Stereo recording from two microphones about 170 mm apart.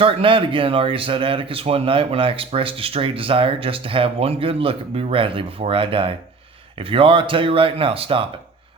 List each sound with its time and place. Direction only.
0.0 s speech: 30° right (ahead or behind)